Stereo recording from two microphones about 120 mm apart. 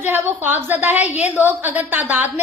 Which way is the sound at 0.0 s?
15° right (ahead or behind).